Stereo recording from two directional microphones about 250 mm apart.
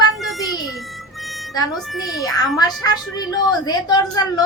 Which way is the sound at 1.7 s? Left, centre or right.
Centre.